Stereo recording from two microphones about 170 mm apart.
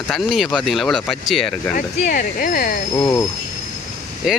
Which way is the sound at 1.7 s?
55° left (ahead or behind).